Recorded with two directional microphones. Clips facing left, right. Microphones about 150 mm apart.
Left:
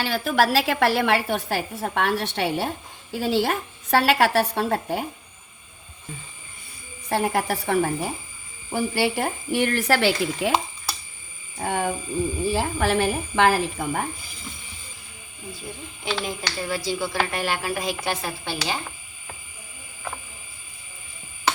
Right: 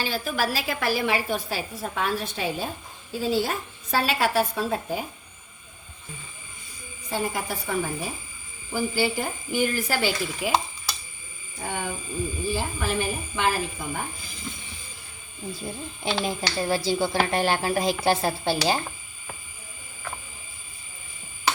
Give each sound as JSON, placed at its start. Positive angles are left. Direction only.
{"t": 0.0, "sound": "a woman's voice", "side_deg": 80}
{"t": 7.1, "sound": "a woman's voice", "side_deg": 70}
{"t": 11.6, "sound": "a woman's voice", "side_deg": 70}
{"t": 16.0, "sound": "speech", "side_deg": -30}